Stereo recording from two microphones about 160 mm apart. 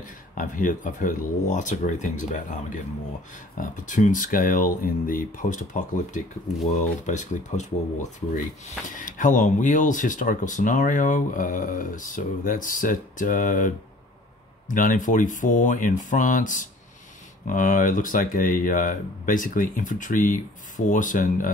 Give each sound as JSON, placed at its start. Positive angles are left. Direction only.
{"t": 0.4, "sound": "speech", "side_deg": 55}